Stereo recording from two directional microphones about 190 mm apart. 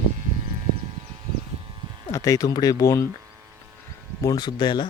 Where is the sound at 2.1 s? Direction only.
15° left (ahead or behind).